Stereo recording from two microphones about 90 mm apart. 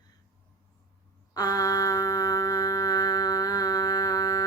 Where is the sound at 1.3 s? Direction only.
40° left (ahead or behind).